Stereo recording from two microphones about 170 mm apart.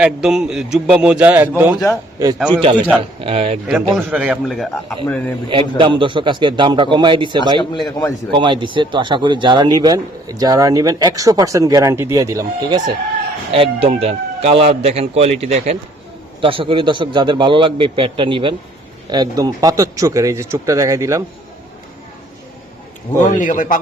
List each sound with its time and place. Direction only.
0.0 s a man's voice: 5° right (ahead or behind)
2.5 s speech: 30° right (ahead or behind)
3.9 s a man's voice: 5° right (ahead or behind); by 5.3 s 10° left (ahead or behind)
5.5 s speech: 30° right (ahead or behind)
7.6 s a man's voice: 25° left (ahead or behind)
8.4 s speech: 30° right (ahead or behind)
13.6 s speech: 35° right (ahead or behind); by 21.2 s 20° right (ahead or behind)
23.1 s a man's voice: 45° left (ahead or behind)